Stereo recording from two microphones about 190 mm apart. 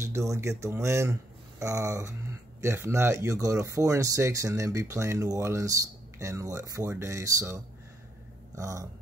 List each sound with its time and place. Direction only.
0.0 s speech: 15° right (ahead or behind)